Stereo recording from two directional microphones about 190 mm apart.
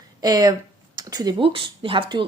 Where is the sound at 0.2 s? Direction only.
20° right (ahead or behind).